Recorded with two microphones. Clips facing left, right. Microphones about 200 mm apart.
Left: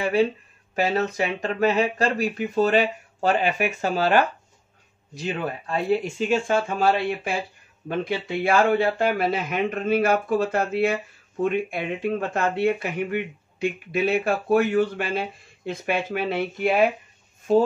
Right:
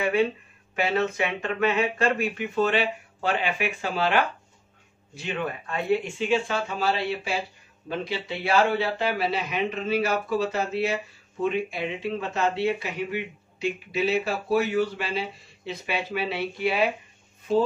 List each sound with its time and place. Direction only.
0.0 s speech: 35° left (ahead or behind)